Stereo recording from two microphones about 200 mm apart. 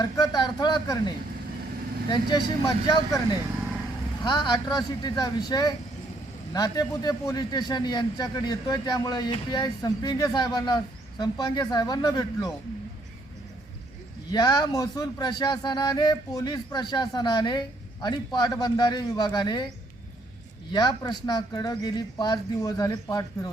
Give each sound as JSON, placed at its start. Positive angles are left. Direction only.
{"t": 0.0, "sound": "a man's voice", "side_deg": 20}
{"t": 14.3, "sound": "a man's voice", "side_deg": 20}
{"t": 20.7, "sound": "a man's voice", "side_deg": 20}